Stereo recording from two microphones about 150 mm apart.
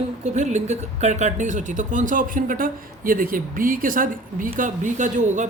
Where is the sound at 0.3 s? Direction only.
50° right (ahead or behind).